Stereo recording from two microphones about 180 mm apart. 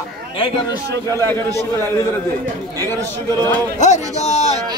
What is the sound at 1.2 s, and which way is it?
A man's voice, 15° left (ahead or behind).